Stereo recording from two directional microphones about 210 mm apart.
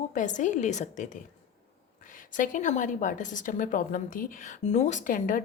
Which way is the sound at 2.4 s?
35° left (ahead or behind).